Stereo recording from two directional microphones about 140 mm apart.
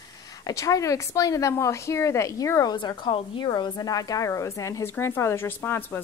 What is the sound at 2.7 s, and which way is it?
A woman's voice, 35° left (ahead or behind).